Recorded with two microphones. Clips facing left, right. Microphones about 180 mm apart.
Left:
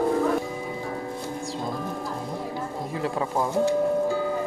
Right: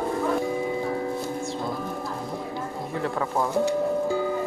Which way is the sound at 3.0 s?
20° left (ahead or behind).